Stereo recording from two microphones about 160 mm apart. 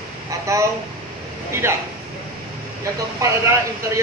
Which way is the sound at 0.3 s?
20° right (ahead or behind).